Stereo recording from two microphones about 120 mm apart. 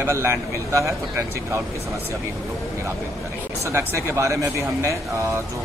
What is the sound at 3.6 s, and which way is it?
A man's voice, 20° right (ahead or behind).